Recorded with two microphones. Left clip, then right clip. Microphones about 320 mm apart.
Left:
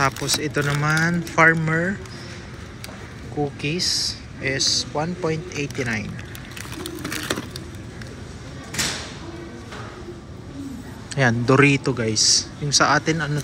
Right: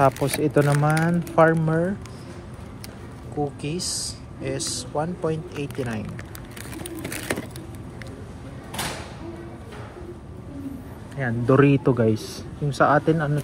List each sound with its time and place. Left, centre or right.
0.0 s speech: centre
3.6 s speech: centre
6.8 s a sound: centre
11.1 s speech: centre